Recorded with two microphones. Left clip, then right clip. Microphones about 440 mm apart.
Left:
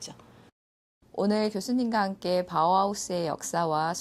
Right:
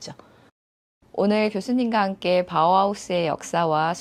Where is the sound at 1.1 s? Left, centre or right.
Centre.